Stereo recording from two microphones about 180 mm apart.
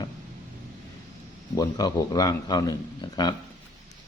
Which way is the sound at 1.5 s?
20° left (ahead or behind).